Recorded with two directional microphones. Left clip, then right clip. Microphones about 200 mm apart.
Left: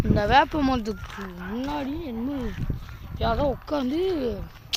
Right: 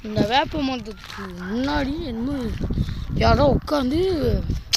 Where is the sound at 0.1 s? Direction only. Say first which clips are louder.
Left 1 dB; 5° left (ahead or behind).